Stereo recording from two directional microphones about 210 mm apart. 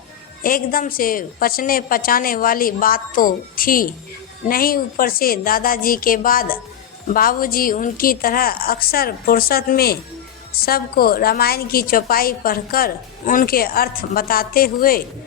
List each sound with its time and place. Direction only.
0.4 s a woman's voice: 40° left (ahead or behind)